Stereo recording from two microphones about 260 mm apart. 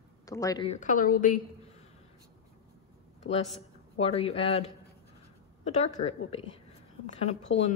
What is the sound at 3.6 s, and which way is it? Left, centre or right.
Speech, left.